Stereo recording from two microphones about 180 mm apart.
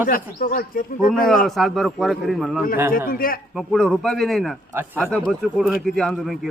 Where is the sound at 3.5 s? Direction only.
Centre (ahead or behind).